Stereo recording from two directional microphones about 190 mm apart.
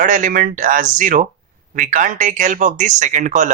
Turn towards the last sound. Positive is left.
turn(degrees=-40)  # may be behind; listen again after turning